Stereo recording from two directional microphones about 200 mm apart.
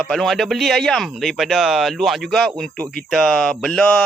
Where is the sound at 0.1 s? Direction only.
Centre (ahead or behind).